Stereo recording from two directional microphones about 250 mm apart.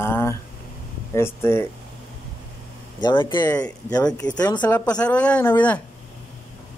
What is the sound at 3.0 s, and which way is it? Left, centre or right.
Speech, centre.